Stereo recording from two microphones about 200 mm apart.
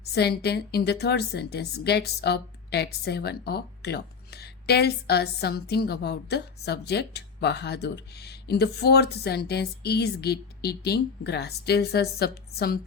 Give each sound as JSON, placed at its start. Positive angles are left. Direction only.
{"t": 0.0, "sound": "a woman's voice", "side_deg": 55}